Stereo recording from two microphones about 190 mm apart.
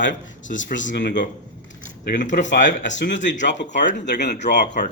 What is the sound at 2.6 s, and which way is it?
Speech, 40° left (ahead or behind).